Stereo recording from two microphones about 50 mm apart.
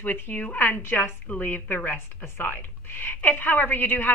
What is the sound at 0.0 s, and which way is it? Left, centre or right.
A woman's voice, left.